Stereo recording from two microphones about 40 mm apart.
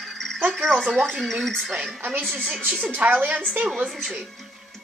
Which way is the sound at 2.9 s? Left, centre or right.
Right.